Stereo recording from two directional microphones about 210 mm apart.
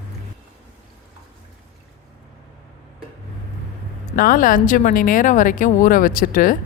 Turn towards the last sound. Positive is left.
turn(degrees=40)  # may be behind; listen again after turning